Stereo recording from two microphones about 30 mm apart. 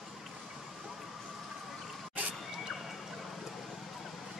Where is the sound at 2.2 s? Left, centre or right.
Right.